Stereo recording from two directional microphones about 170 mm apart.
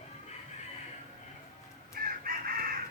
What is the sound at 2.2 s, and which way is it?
Chicken, 55° right (ahead or behind).